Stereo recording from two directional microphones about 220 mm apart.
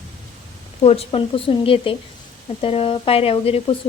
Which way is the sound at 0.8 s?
30° left (ahead or behind).